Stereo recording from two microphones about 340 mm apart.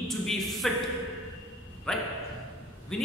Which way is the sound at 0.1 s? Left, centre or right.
Centre.